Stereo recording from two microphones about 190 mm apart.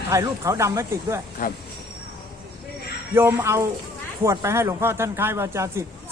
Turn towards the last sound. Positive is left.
turn(degrees=-15)  # may be behind; listen again after turning